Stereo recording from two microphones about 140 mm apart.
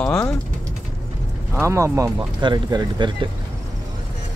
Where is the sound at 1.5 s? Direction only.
20° right (ahead or behind).